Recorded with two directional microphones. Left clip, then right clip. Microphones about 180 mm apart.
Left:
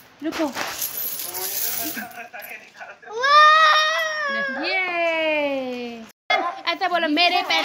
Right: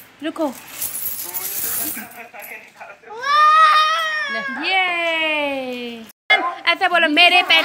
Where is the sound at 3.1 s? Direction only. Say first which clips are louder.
Even; 50° left (ahead or behind).